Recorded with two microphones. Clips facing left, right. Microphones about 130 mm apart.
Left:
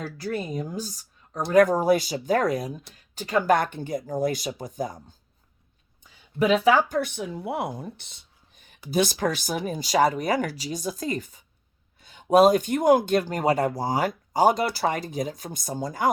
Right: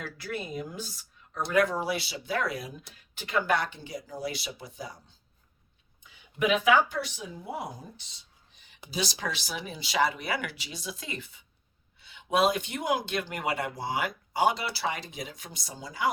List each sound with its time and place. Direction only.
0.0 s speech: 40° left (ahead or behind)